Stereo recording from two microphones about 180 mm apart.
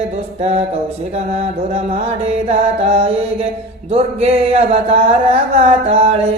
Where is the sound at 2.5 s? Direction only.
35° right (ahead or behind).